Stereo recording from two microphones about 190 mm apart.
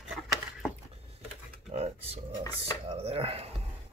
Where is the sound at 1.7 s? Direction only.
35° right (ahead or behind).